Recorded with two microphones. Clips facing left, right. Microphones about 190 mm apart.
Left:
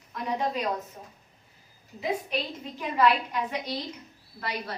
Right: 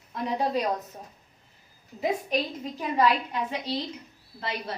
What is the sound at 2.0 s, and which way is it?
A woman's voice, 40° right (ahead or behind).